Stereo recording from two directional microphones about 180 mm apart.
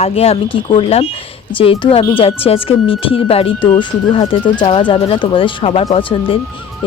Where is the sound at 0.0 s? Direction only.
35° left (ahead or behind).